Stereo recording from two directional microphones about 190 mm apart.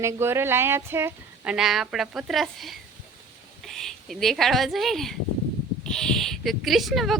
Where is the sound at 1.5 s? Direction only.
Centre (ahead or behind).